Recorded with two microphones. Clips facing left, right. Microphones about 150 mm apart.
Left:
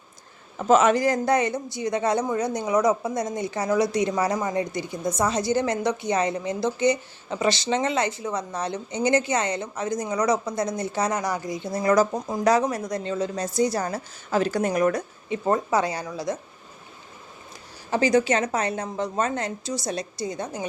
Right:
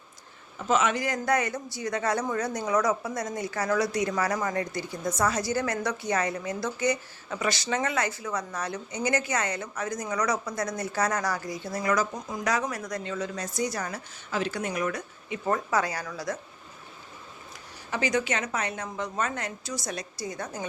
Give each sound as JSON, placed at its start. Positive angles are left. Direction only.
{"t": 0.7, "sound": "speech", "side_deg": 40}
{"t": 17.9, "sound": "speech", "side_deg": 30}